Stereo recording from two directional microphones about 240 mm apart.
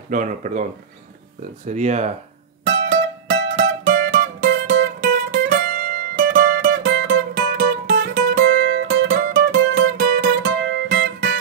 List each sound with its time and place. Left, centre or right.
0.1 s speech: right
1.7 s speech: right
2.6 s music: right